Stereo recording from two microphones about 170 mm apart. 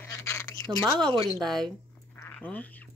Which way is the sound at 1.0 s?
30° right (ahead or behind).